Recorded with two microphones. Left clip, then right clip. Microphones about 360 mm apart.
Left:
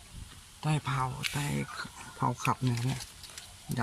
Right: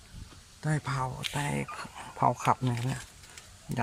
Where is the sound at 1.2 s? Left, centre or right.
Centre.